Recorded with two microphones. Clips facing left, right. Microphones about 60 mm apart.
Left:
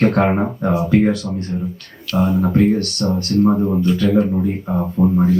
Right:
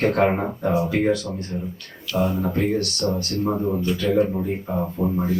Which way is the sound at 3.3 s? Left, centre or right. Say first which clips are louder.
Left 10 dB; centre.